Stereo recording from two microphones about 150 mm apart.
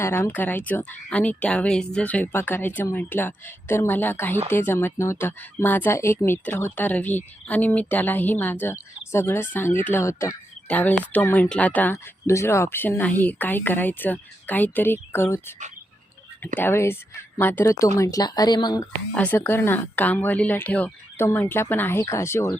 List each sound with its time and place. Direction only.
0.0 s speech: 15° left (ahead or behind)
16.6 s speech: 15° left (ahead or behind)
19.1 s speech: 10° left (ahead or behind)